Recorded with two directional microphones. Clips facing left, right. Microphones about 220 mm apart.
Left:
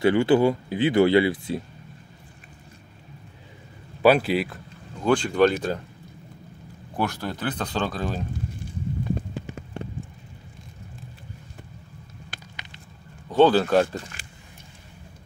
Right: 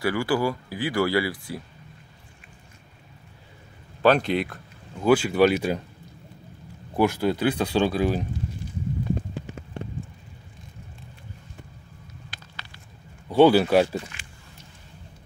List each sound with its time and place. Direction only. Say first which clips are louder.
0.0 s speech: left 6 dB; 25° left (ahead or behind)
4.0 s speech: left 2 dB; 5° left (ahead or behind)
5.0 s speech: right 1 dB; 5° right (ahead or behind)
7.0 s speech: right 6 dB; 10° right (ahead or behind)
13.3 s speech: right 1 dB; 10° right (ahead or behind)
14.2 s a sound: left 1 dB; 35° left (ahead or behind)